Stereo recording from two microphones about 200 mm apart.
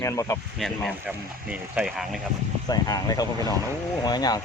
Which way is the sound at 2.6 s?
20° left (ahead or behind).